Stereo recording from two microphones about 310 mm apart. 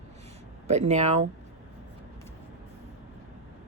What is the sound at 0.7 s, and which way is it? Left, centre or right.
Speech, right.